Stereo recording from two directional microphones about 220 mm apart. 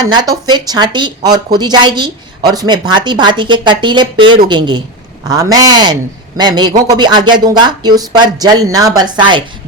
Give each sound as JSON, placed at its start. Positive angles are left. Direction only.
{"t": 0.0, "sound": "a woman's voice", "side_deg": -20}